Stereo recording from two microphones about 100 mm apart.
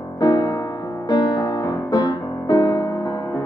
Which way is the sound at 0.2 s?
40° left (ahead or behind).